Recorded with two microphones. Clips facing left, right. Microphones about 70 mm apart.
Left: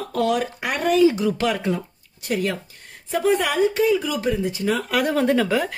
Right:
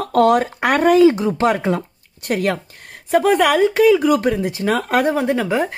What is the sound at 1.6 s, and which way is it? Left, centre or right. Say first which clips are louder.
Speech: right 4 dB; right.